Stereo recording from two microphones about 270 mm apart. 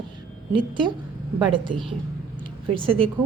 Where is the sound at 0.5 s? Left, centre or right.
Centre.